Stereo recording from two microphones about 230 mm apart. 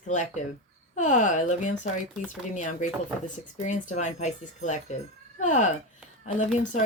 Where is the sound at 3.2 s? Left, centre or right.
Left.